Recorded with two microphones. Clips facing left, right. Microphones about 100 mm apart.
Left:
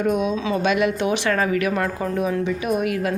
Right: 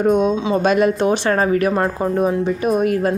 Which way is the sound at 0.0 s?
35° right (ahead or behind).